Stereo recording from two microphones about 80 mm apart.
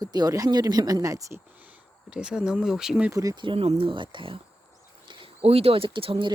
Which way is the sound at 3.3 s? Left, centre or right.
Right.